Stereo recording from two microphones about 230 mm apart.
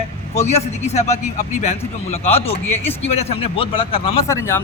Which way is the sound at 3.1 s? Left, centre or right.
Left.